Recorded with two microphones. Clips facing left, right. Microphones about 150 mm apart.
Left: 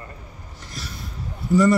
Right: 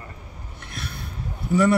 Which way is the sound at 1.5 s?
65° right (ahead or behind).